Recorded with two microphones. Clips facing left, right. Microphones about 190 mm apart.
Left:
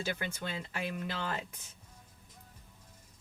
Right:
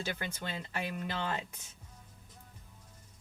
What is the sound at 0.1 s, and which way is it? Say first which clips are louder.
Speech: left 1 dB; centre (ahead or behind).